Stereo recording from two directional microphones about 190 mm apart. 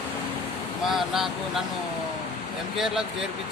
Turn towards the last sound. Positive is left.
turn(degrees=0)  # may be behind; listen again after turning